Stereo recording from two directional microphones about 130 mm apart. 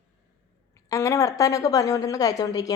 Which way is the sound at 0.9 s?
25° left (ahead or behind).